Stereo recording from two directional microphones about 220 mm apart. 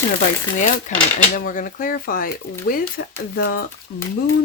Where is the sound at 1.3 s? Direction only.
40° left (ahead or behind).